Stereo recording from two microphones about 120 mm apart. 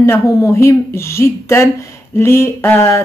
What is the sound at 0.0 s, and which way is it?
Speech, 20° left (ahead or behind).